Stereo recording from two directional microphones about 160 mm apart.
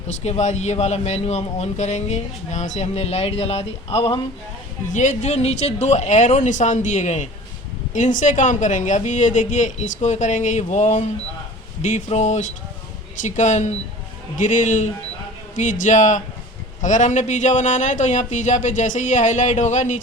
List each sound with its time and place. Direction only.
0.1 s a man's voice: 45° left (ahead or behind)
4.9 s a man's voice: 50° left (ahead or behind)